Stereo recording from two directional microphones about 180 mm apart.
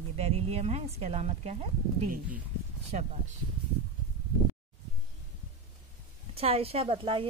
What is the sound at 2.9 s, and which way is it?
Speech, 40° right (ahead or behind).